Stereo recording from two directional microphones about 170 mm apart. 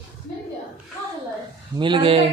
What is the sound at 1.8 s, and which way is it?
Speech, 30° right (ahead or behind).